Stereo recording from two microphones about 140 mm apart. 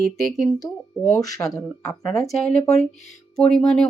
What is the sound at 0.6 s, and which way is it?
Speech, 20° left (ahead or behind).